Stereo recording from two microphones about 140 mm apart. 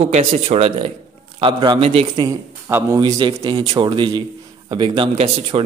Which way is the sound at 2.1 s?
25° right (ahead or behind).